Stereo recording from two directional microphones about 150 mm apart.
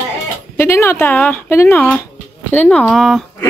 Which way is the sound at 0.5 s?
15° left (ahead or behind).